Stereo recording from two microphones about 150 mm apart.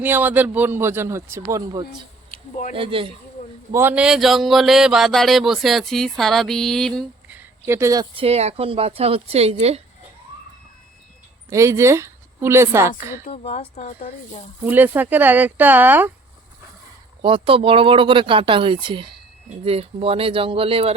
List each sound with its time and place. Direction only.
0.0 s a man's voice: 10° right (ahead or behind)
2.3 s a sound: 55° left (ahead or behind)
2.7 s speech: 35° right (ahead or behind)
3.7 s speech: 15° right (ahead or behind); by 7.0 s 5° left (ahead or behind)
7.3 s a sound: 15° right (ahead or behind)
8.1 s speech: 40° right (ahead or behind)
11.4 s a woman's voice: 20° right (ahead or behind)
13.3 s speech: 40° left (ahead or behind)
14.6 s a man's voice: 10° right (ahead or behind)
17.2 s speech: 35° right (ahead or behind)